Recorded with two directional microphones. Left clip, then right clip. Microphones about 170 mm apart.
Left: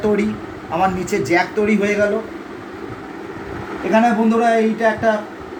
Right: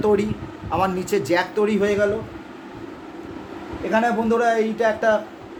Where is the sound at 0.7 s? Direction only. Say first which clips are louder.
Left 3 dB; 40° right (ahead or behind).